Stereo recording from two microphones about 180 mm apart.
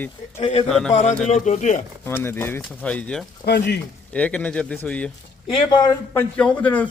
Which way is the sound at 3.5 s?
70° left (ahead or behind).